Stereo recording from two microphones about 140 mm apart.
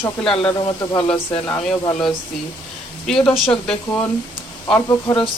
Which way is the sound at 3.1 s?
5° left (ahead or behind).